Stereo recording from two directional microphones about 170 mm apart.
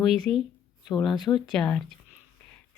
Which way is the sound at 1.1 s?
25° left (ahead or behind).